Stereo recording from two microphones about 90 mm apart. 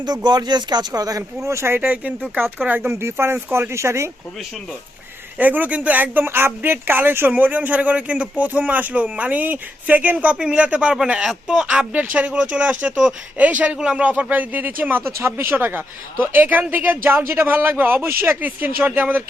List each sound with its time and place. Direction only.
0.0 s speech: 50° right (ahead or behind); by 1.8 s 30° right (ahead or behind)
1.8 s speech: 15° right (ahead or behind)
5.4 s speech: 20° right (ahead or behind)